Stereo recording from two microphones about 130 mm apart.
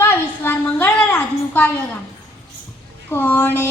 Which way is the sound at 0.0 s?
15° left (ahead or behind).